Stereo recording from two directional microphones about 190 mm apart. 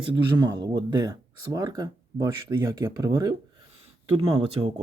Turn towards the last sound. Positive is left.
turn(degrees=-30)  # may be behind; listen again after turning